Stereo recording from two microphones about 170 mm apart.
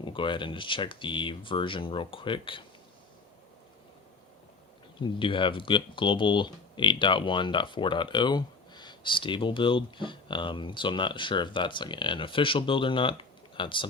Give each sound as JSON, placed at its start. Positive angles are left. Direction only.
{"t": 0.0, "sound": "speech", "side_deg": 30}
{"t": 4.9, "sound": "speech", "side_deg": 30}